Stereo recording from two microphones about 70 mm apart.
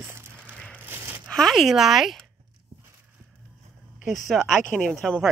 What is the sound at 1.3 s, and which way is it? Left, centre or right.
Speech, centre.